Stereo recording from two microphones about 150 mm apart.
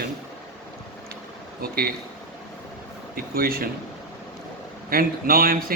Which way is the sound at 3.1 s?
85° right.